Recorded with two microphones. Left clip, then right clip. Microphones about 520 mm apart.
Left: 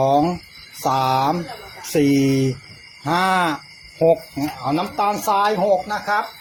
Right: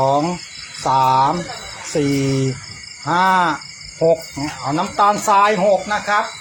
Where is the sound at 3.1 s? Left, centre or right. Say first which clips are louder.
Right 3 dB; left.